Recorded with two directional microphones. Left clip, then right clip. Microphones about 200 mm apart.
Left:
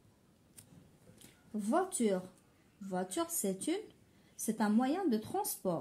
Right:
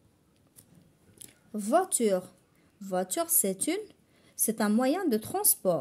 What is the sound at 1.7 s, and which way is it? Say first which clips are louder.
Speech: right 7 dB; 60° right (ahead or behind).